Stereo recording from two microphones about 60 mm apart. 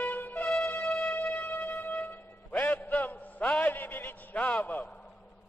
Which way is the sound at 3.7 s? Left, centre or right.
Left.